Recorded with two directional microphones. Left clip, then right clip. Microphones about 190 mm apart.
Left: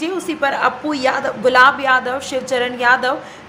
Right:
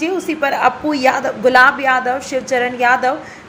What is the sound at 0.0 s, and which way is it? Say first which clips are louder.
A woman's voice: right 2 dB; 5° right (ahead or behind).